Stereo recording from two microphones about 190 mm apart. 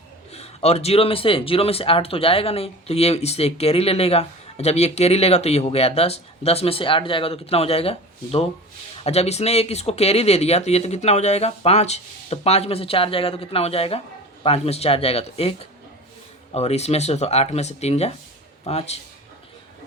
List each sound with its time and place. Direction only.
0.3 s speech: 35° left (ahead or behind)
16.6 s speech: 35° left (ahead or behind)